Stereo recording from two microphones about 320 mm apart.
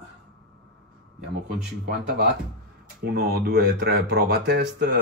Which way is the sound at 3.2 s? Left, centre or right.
Right.